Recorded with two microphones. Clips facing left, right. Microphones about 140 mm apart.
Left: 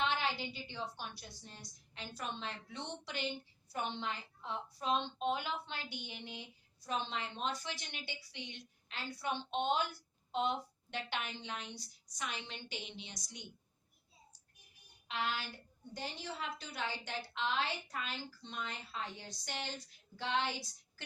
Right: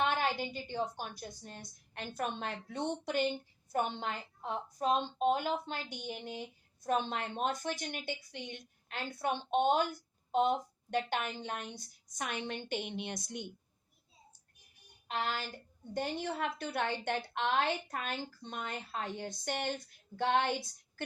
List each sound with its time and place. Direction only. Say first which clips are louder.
0.0 s a woman's voice: right 4 dB; 50° right (ahead or behind)
15.0 s a woman's voice: right 3 dB; 45° right (ahead or behind)